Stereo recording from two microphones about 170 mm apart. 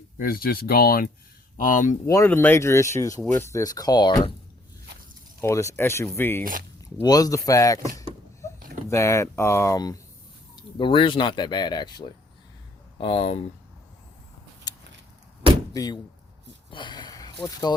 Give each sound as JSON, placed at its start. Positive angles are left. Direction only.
{"t": 0.2, "sound": "speech", "side_deg": 60}
{"t": 1.5, "sound": "speech", "side_deg": 50}
{"t": 2.0, "sound": "speech", "side_deg": 15}
{"t": 5.4, "sound": "speech", "side_deg": 15}
{"t": 6.4, "sound": "speech", "side_deg": -55}
{"t": 7.0, "sound": "speech", "side_deg": 20}
{"t": 15.7, "sound": "speech", "side_deg": 20}
{"t": 16.7, "sound": "a sound", "side_deg": 25}